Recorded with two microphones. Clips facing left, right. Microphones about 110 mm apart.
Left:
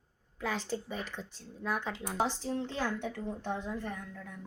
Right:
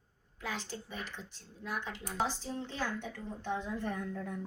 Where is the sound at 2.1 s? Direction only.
25° left (ahead or behind).